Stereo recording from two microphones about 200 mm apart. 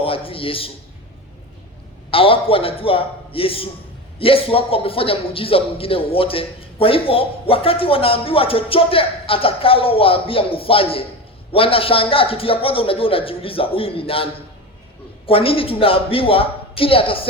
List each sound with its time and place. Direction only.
0.0 s a man's voice: 25° left (ahead or behind)
2.0 s a man's voice: 25° left (ahead or behind)